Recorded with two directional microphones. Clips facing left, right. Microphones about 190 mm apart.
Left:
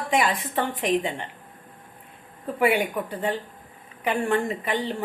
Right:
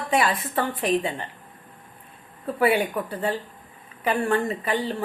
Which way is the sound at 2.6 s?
15° left (ahead or behind).